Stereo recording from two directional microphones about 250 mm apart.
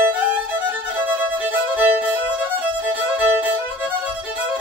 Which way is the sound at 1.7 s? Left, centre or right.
Centre.